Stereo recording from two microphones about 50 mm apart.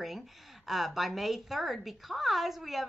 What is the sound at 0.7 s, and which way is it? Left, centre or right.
A woman's voice, centre.